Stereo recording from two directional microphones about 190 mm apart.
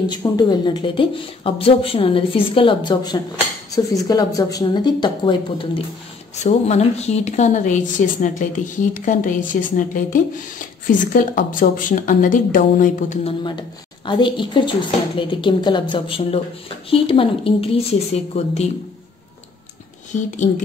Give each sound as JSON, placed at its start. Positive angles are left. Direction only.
{"t": 0.1, "sound": "speech", "side_deg": 20}
{"t": 6.4, "sound": "a woman's voice", "side_deg": 35}
{"t": 13.2, "sound": "speech", "side_deg": 25}